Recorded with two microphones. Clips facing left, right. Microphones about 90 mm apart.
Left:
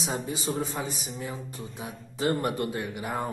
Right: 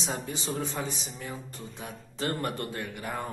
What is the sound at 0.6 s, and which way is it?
A man's voice, 20° left (ahead or behind).